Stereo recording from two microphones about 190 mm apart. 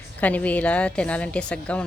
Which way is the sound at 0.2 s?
10° left (ahead or behind).